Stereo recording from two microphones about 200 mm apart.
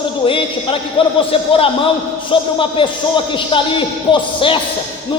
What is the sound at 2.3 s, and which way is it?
Speech, 25° left (ahead or behind).